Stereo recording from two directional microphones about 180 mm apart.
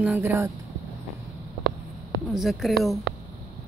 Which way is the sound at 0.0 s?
10° right (ahead or behind).